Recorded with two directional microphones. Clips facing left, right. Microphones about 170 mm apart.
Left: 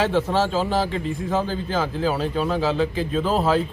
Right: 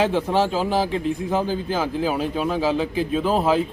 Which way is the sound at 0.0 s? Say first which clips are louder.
Right 1 dB; 15° right (ahead or behind).